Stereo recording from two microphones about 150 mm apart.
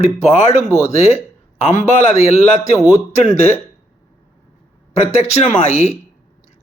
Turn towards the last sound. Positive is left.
turn(degrees=50)  # may be behind; listen again after turning